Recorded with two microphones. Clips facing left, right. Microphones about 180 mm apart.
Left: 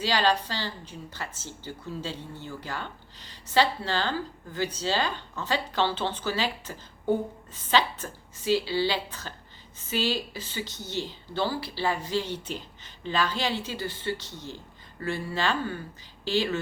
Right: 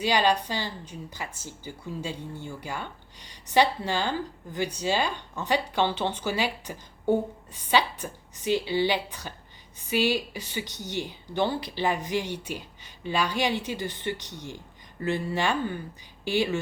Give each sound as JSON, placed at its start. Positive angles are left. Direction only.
{"t": 0.0, "sound": "speech", "side_deg": -15}